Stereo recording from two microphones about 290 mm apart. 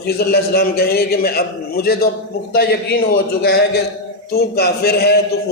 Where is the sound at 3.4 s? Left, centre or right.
Left.